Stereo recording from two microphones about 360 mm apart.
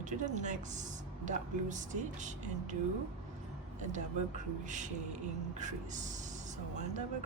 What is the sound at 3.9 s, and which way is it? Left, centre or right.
Speech, centre.